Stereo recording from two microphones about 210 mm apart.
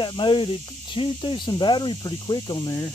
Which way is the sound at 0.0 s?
25° left (ahead or behind).